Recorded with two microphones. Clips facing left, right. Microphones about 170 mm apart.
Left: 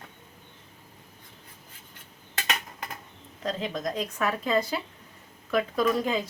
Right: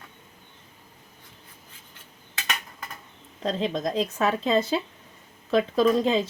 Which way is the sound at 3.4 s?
30° right (ahead or behind).